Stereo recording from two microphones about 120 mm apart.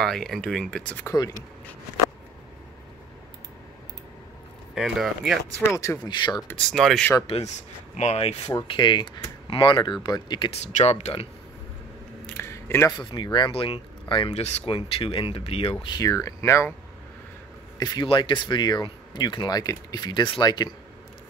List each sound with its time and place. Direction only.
0.0 s speech: 5° left (ahead or behind)
4.7 s speech: centre (ahead or behind)
6.0 s speech: 40° left (ahead or behind)
6.5 s speech: centre (ahead or behind)
7.2 s speech: 65° left (ahead or behind)
8.6 s speech: 40° left (ahead or behind)
10.6 s speech: 65° left (ahead or behind)
12.4 s a sound: 20° left (ahead or behind)
12.9 s speech: 40° left (ahead or behind)
14.3 s speech: 60° left (ahead or behind)
16.0 s speech: 25° left (ahead or behind)
17.7 s speech: 35° left (ahead or behind)
18.0 s speech: 45° left (ahead or behind)